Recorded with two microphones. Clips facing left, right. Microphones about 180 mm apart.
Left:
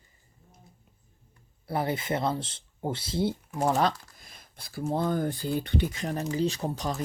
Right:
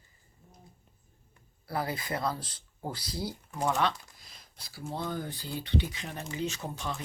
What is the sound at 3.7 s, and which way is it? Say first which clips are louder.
Speech: left 4 dB; 45° left (ahead or behind).